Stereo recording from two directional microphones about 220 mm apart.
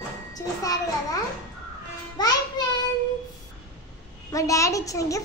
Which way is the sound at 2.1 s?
20° left (ahead or behind).